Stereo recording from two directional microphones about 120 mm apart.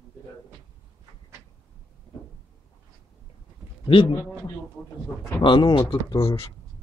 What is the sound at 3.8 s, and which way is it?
Speech, 40° left (ahead or behind).